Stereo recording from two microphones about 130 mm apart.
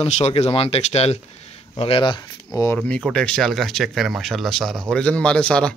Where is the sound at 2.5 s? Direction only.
25° left (ahead or behind).